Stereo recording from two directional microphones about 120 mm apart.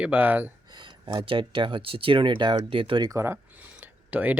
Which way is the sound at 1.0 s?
45° right (ahead or behind).